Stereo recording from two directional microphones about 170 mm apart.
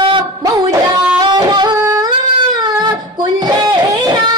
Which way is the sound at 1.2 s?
25° right (ahead or behind).